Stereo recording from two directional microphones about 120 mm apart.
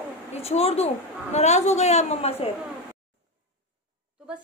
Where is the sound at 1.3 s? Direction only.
70° left (ahead or behind).